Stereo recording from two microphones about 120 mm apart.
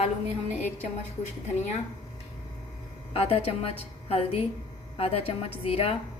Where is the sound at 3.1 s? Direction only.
55° left (ahead or behind).